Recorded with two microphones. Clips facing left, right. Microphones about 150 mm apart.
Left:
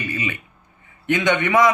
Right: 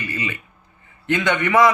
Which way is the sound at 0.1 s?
15° left (ahead or behind).